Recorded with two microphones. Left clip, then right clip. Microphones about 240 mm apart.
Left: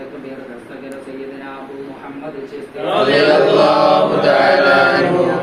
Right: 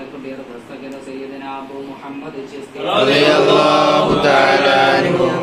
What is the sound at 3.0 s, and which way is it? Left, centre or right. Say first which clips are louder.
Chant: left 1 dB; right.